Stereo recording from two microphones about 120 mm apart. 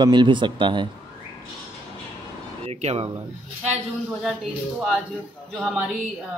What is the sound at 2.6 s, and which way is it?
Speech, 60° right (ahead or behind).